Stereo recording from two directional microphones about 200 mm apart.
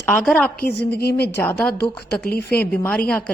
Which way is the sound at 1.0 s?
50° left (ahead or behind).